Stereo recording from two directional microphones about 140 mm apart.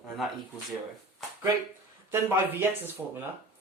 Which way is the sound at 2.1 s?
15° right (ahead or behind).